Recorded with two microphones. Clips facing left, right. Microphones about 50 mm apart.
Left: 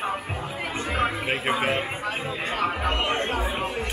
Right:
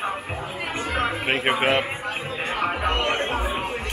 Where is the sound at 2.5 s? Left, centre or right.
Right.